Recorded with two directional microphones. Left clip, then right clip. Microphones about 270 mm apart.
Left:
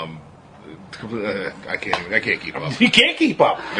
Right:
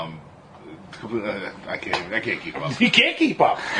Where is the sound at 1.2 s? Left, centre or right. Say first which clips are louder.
Left 3 dB; left.